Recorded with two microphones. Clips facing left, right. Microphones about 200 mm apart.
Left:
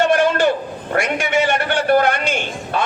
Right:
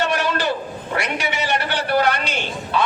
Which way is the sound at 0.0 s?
50° left (ahead or behind).